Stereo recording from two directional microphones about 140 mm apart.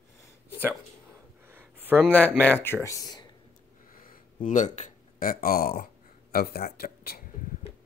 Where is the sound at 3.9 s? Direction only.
85° left.